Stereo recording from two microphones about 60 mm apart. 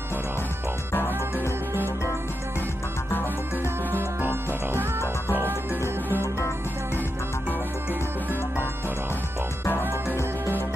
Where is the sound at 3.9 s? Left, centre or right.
Right.